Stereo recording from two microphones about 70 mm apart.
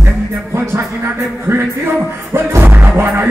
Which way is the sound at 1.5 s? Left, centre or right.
Right.